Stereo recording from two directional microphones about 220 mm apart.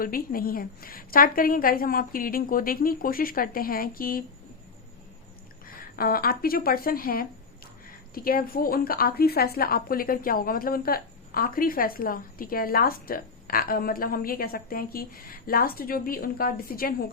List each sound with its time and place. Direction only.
0.0 s a woman's voice: 40° left (ahead or behind)
5.6 s a woman's voice: 40° left (ahead or behind)